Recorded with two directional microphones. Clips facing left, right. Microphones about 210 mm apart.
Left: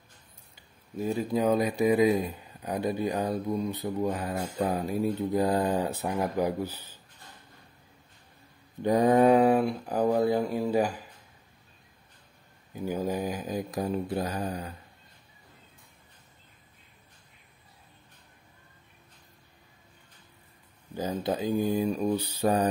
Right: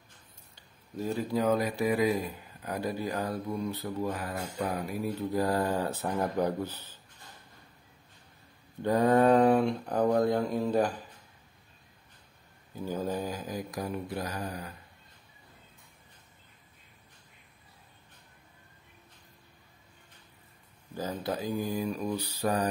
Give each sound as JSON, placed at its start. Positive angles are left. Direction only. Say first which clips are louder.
{"t": 0.9, "sound": "speech", "louder": "left 2 dB", "side_deg": 15}
{"t": 8.8, "sound": "speech", "louder": "left 2 dB", "side_deg": 15}
{"t": 12.7, "sound": "speech", "louder": "left 2 dB", "side_deg": 15}
{"t": 20.9, "sound": "speech", "louder": "left 4 dB", "side_deg": 20}